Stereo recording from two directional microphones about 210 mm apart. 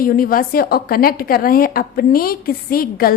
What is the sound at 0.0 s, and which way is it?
A woman's voice, 45° left (ahead or behind).